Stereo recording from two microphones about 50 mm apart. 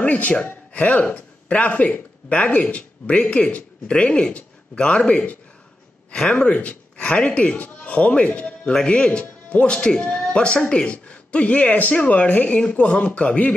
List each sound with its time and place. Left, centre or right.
0.0 s speech: left